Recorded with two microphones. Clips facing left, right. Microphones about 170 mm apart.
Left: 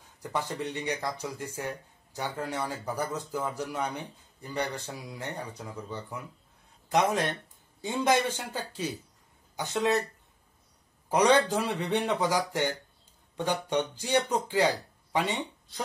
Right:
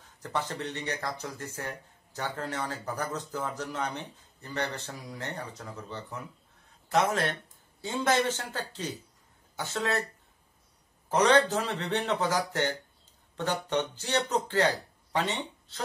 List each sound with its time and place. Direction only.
0.2 s speech: 10° left (ahead or behind)
11.1 s speech: 10° left (ahead or behind)